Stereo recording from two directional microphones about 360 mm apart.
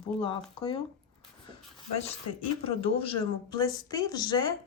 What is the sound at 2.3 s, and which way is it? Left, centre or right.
Speech, left.